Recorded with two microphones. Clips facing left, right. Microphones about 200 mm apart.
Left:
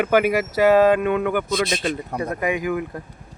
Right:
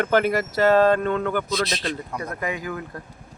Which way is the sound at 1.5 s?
50° left (ahead or behind).